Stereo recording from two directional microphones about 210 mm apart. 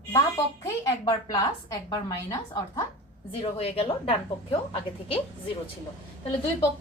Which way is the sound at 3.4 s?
25° left (ahead or behind).